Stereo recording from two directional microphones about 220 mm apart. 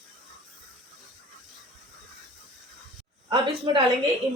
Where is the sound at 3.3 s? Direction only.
20° right (ahead or behind).